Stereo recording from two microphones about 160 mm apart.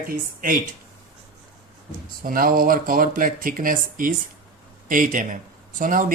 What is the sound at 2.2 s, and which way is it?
Speech, 60° right (ahead or behind).